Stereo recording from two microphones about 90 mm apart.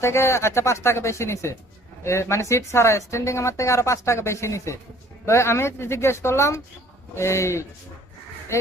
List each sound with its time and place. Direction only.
0.0 s speech: 30° left (ahead or behind)